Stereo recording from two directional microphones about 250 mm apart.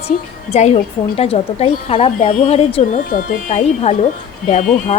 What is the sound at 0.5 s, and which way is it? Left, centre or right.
A woman's voice, left.